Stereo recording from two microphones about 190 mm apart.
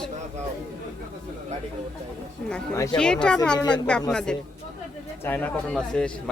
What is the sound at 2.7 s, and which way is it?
Speech, 15° left (ahead or behind).